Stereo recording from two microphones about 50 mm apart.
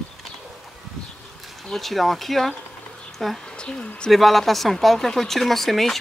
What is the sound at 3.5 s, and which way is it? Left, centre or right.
Speech, centre.